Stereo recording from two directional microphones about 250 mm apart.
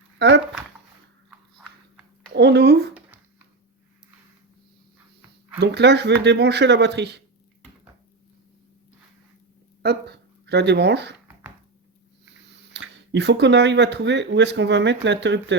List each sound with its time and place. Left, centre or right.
0.2 s speech: right
1.3 s a sound: centre
2.3 s speech: right
5.5 s speech: right
10.4 s speech: right
12.7 s speech: right